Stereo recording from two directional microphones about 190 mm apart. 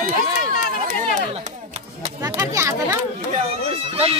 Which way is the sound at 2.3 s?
15° right (ahead or behind).